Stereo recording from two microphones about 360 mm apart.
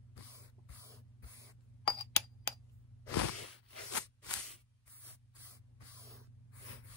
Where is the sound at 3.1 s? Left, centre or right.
Left.